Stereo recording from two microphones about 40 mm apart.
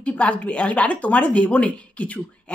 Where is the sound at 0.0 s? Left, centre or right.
Left.